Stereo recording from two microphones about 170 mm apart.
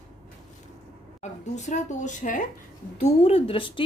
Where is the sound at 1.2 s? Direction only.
45° left (ahead or behind).